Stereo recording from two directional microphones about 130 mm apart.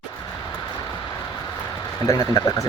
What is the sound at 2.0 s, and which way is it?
Speech, 25° left (ahead or behind).